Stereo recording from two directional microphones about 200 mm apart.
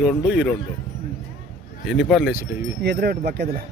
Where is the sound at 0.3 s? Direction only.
5° right (ahead or behind).